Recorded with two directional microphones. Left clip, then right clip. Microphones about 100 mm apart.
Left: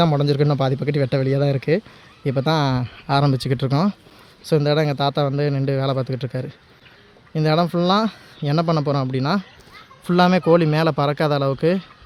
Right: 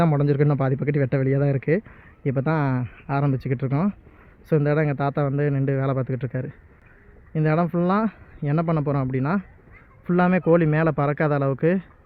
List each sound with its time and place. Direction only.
0.0 s speech: 30° left (ahead or behind); by 3.9 s 50° left (ahead or behind)
4.4 s speech: 25° left (ahead or behind)